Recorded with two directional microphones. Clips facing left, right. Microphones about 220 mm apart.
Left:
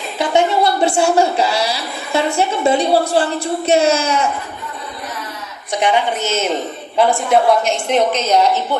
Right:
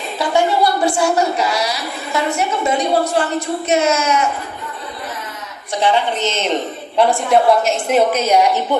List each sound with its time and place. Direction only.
0.2 s a woman's voice: 25° left (ahead or behind)
5.8 s a woman's voice: 10° left (ahead or behind); by 8.6 s 10° right (ahead or behind)